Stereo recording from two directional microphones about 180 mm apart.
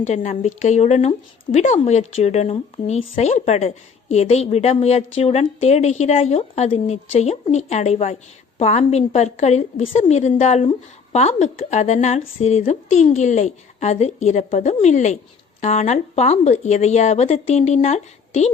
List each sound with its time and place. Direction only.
0.0 s a woman's voice: 40° left (ahead or behind)